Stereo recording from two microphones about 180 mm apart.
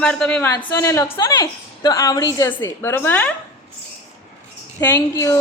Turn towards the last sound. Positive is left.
turn(degrees=20)  # may be behind; listen again after turning